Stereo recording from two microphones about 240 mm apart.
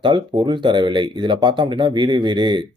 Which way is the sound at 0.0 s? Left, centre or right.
Centre.